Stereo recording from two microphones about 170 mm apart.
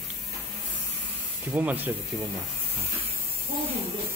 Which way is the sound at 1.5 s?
10° right (ahead or behind).